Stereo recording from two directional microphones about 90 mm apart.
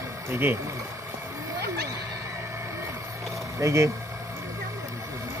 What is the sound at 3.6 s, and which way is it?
Speech, 35° right (ahead or behind).